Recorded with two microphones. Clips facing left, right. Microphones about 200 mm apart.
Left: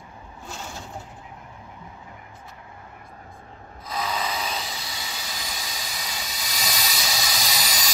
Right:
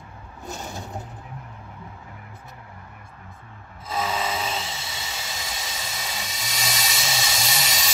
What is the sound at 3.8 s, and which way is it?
Rub, 25° right (ahead or behind).